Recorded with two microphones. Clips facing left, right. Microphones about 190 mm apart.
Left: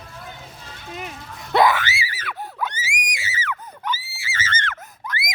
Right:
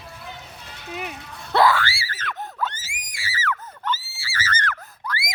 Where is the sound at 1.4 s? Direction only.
20° left (ahead or behind).